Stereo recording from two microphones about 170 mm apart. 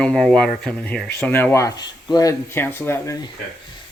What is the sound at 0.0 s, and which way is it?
Speech, 5° left (ahead or behind).